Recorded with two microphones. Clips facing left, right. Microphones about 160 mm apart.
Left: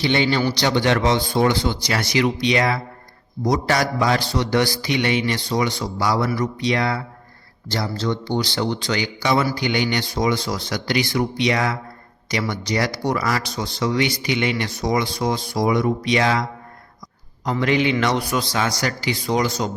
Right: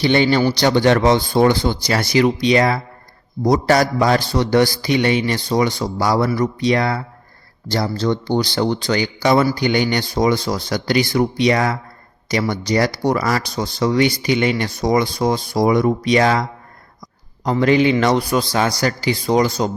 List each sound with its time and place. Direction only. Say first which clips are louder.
0.0 s a man's voice: right 4 dB; 45° right (ahead or behind)
8.0 s a man's voice: right 4 dB; 45° right (ahead or behind)